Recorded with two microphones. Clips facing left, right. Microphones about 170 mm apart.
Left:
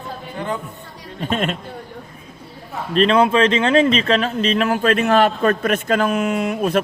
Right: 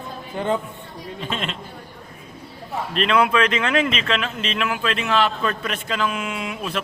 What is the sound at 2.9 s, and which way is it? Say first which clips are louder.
Speech: left 5 dB; 35° left (ahead or behind).